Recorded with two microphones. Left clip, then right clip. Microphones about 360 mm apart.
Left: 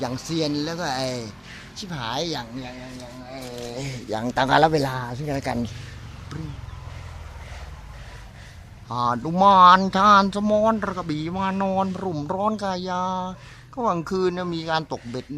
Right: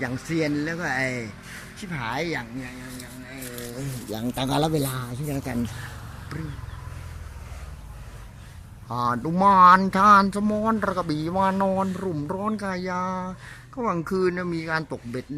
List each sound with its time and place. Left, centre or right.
0.0 s speech: centre
4.2 s a man's voice: left
8.9 s speech: centre